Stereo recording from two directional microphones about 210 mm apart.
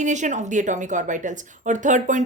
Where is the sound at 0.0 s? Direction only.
35° right (ahead or behind).